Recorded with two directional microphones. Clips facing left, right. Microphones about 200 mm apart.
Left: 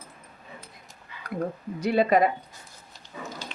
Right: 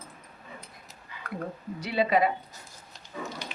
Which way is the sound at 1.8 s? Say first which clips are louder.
Left 4 dB; 45° left (ahead or behind).